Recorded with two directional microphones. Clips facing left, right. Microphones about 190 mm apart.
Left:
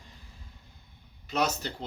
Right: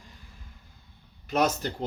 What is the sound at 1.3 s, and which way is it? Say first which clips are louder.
Speech: right 4 dB; 50° right (ahead or behind).